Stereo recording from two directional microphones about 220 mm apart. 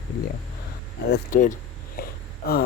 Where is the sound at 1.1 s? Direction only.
35° left (ahead or behind).